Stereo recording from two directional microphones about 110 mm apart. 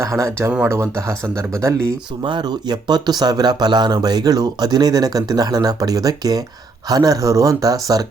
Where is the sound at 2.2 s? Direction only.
45° right (ahead or behind).